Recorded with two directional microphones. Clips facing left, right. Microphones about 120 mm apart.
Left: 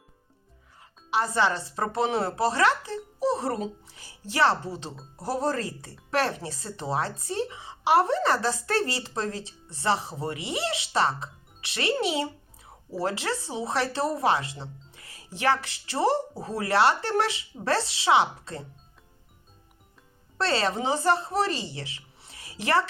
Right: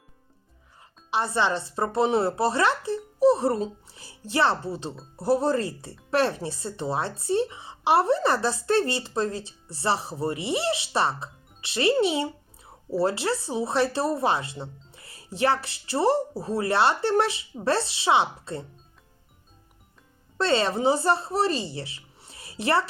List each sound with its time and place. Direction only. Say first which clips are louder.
0.8 s a woman's voice: even; 30° right (ahead or behind)
20.5 s speech: right 4 dB; 25° right (ahead or behind)